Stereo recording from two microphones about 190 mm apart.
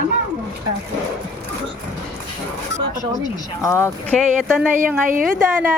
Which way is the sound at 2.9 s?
20° left (ahead or behind).